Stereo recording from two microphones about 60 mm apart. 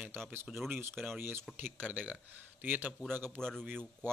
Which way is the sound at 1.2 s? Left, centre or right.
Right.